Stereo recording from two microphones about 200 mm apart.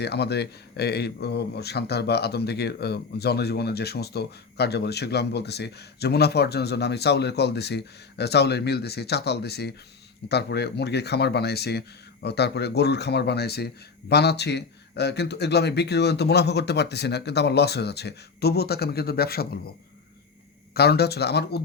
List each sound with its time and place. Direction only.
0.0 s speech: 55° left (ahead or behind)
20.7 s speech: 55° left (ahead or behind)